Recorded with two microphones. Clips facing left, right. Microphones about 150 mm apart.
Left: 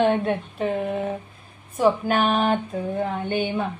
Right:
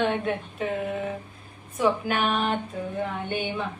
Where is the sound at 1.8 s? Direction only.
35° left (ahead or behind).